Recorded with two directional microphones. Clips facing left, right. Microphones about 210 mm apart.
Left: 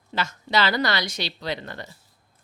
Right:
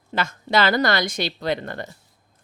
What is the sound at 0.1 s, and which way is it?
A woman's voice, 50° right (ahead or behind).